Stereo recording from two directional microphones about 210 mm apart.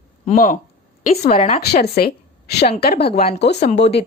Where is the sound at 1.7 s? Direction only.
45° left (ahead or behind).